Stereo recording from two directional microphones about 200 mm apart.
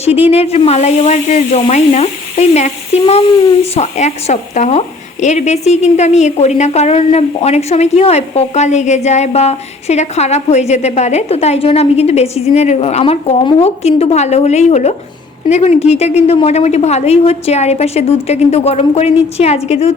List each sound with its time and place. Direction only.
0.0 s speech: 30° left (ahead or behind)